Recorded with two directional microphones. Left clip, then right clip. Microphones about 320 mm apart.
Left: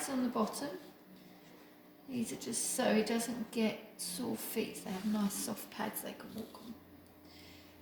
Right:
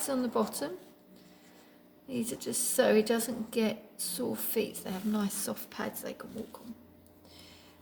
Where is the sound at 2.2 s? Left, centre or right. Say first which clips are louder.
Right 3 dB; centre.